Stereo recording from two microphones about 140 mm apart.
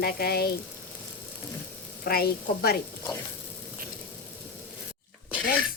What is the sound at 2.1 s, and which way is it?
Speech, 90° left.